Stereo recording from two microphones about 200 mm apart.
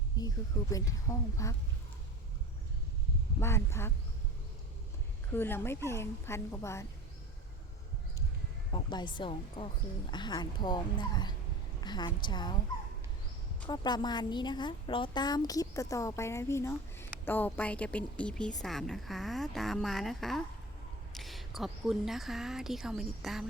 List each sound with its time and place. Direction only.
0.2 s a woman's voice: 20° left (ahead or behind)
3.4 s a woman's voice: 15° left (ahead or behind)
5.3 s a woman's voice: 10° left (ahead or behind)
8.7 s a woman's voice: 25° left (ahead or behind)
13.7 s a woman's voice: 20° left (ahead or behind); by 23.5 s centre (ahead or behind)